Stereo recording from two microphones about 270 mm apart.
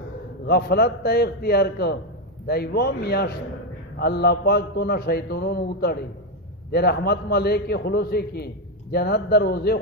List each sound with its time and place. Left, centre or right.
0.5 s a man's voice: left